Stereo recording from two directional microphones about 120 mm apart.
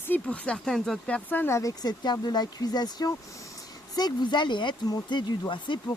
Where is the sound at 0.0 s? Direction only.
15° left (ahead or behind).